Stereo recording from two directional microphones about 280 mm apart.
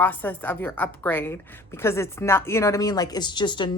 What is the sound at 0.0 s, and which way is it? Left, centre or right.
A woman's voice, centre.